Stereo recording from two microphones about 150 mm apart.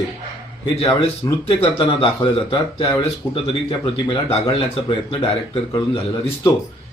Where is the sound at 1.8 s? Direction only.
40° left (ahead or behind).